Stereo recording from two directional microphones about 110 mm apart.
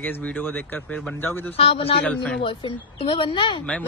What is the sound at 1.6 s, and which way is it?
A man's voice, 60° left (ahead or behind).